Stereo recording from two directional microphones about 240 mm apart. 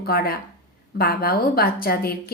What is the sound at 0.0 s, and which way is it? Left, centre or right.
Speech, left.